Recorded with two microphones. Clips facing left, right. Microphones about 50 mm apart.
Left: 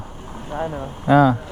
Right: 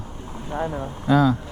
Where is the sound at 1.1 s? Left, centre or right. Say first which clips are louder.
Left 4 dB; left.